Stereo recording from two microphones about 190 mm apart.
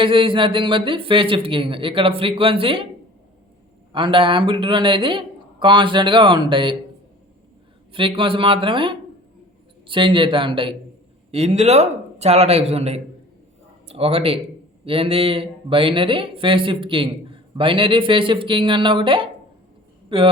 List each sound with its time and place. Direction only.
0.0 s speech: 25° right (ahead or behind)
3.9 s speech: 25° right (ahead or behind)
7.9 s a man's voice: 25° right (ahead or behind)